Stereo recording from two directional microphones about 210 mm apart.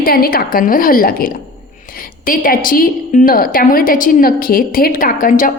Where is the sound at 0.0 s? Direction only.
45° left (ahead or behind).